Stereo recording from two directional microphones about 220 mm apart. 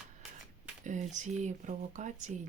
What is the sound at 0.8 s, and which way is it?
Speech, 35° right (ahead or behind).